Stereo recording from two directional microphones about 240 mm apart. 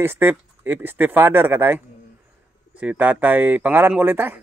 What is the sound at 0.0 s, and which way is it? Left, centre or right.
Speech, centre.